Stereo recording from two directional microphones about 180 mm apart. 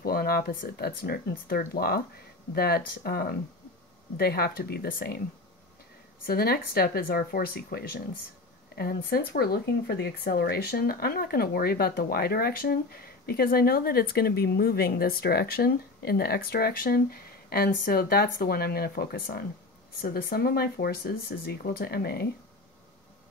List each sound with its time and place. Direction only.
0.0 s speech: 55° left (ahead or behind)
6.2 s speech: 60° left (ahead or behind)